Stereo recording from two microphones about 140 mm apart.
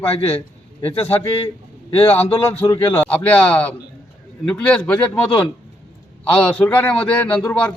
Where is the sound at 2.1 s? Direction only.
15° left (ahead or behind).